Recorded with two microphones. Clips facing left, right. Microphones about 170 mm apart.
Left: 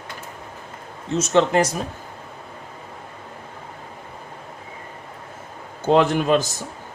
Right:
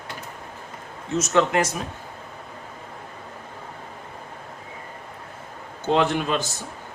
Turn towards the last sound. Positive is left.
turn(degrees=40)  # may be behind; listen again after turning